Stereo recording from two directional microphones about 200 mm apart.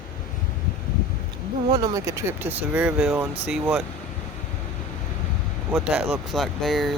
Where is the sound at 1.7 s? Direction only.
20° right (ahead or behind).